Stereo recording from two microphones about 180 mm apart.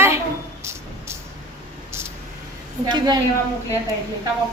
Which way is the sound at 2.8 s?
25° right (ahead or behind).